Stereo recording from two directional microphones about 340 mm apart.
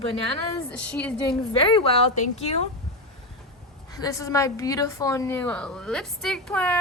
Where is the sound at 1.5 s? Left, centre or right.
Centre.